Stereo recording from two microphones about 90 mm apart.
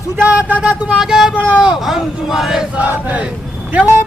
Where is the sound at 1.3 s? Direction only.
5° right (ahead or behind).